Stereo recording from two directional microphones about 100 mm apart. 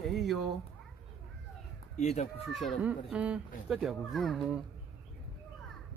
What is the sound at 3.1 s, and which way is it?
Speech, 10° right (ahead or behind).